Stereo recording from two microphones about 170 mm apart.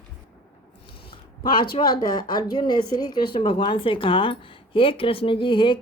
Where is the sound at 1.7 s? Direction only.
25° left (ahead or behind).